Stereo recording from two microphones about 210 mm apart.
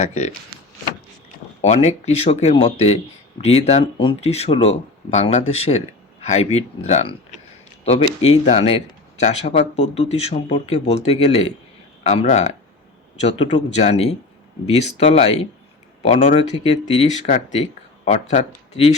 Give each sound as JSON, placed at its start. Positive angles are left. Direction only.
{"t": 0.0, "sound": "speech", "side_deg": 30}
{"t": 1.6, "sound": "speech", "side_deg": 30}